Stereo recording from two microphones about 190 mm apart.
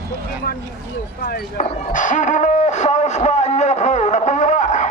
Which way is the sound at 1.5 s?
40° left (ahead or behind).